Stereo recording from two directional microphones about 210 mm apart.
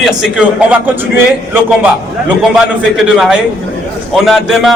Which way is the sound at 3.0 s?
Centre (ahead or behind).